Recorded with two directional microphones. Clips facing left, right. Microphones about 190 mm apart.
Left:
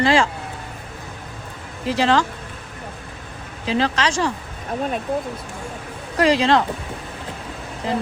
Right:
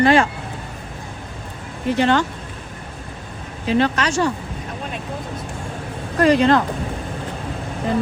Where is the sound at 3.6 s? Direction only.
90° left.